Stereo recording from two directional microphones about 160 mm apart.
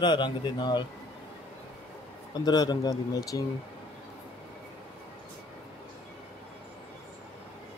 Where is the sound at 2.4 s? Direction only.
25° left (ahead or behind).